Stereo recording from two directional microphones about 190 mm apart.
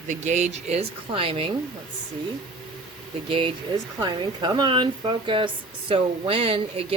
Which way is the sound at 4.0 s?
25° right (ahead or behind).